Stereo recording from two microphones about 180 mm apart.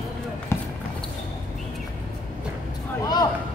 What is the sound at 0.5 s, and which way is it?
Basketball bounce, 15° left (ahead or behind).